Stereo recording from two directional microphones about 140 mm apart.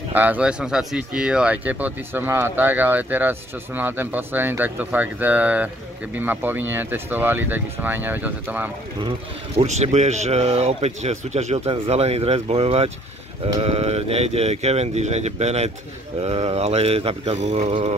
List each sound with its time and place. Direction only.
0.1 s speech: 10° right (ahead or behind)
9.6 s speech: 55° right (ahead or behind)